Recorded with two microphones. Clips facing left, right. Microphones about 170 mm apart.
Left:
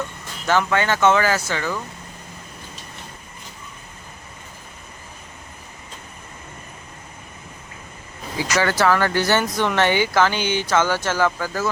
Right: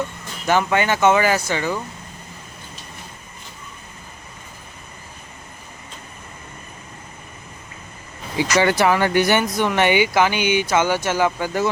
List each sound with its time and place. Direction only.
0.4 s speech: 15° right (ahead or behind)
8.4 s speech: 20° right (ahead or behind)